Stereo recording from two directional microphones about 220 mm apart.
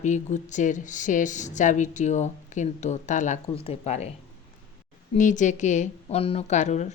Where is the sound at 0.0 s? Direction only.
35° left (ahead or behind).